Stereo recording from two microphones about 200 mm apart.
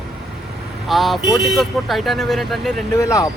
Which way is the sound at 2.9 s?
15° left (ahead or behind).